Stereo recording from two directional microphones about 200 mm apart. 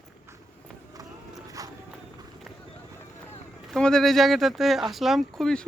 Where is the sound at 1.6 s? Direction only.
15° right (ahead or behind).